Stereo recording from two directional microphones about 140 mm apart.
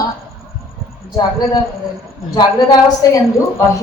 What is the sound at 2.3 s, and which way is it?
Speech, 25° left (ahead or behind).